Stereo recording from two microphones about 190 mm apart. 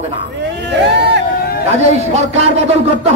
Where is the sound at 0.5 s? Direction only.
65° right (ahead or behind).